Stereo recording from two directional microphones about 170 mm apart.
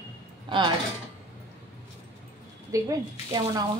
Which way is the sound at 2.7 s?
20° right (ahead or behind).